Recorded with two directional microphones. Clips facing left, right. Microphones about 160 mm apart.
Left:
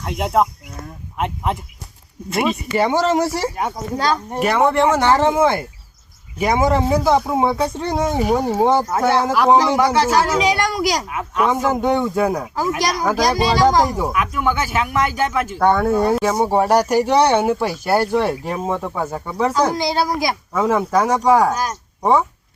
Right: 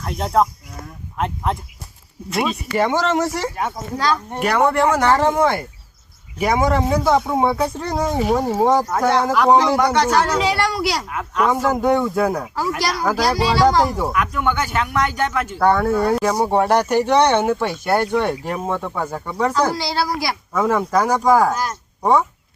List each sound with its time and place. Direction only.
0.0 s speech: 20° left (ahead or behind)
3.5 s speech: 20° left (ahead or behind)
4.3 s speech: centre (ahead or behind)
15.9 s speech: 15° left (ahead or behind)
16.1 s speech: centre (ahead or behind)
19.5 s speech: 15° left (ahead or behind)
20.5 s speech: 5° left (ahead or behind)
21.5 s speech: 15° left (ahead or behind)
22.0 s speech: centre (ahead or behind)